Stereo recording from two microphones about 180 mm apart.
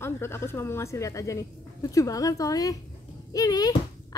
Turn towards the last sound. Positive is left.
turn(degrees=20)  # may be behind; listen again after turning